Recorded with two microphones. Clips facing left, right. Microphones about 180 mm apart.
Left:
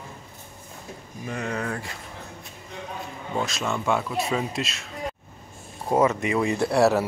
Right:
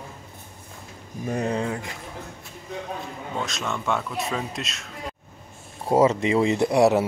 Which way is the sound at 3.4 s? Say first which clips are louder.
Left 2 dB; 5° left (ahead or behind).